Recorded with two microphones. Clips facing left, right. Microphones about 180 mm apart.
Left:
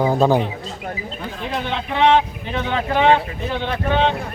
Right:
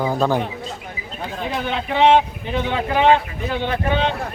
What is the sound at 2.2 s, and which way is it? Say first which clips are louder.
Speech: right 1 dB; 10° right (ahead or behind).